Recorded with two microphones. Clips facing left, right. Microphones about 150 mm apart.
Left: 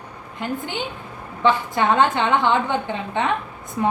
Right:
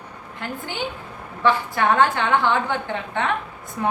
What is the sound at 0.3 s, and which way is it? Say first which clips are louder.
A woman's voice: left 3 dB; 20° left (ahead or behind).